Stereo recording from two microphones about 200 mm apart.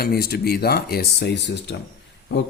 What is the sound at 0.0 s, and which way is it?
Speech, 50° left (ahead or behind).